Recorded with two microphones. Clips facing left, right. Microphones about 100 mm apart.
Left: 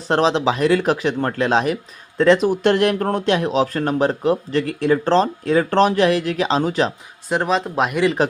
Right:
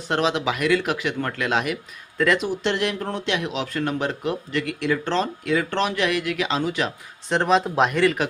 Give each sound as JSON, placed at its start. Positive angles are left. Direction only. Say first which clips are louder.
{"t": 0.1, "sound": "speech", "louder": "left 5 dB", "side_deg": 35}
{"t": 2.5, "sound": "speech", "louder": "left 7 dB", "side_deg": 50}
{"t": 7.3, "sound": "speech", "louder": "even", "side_deg": 5}